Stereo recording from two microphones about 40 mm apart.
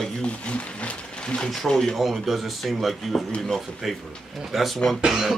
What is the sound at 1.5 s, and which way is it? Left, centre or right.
Speech, centre.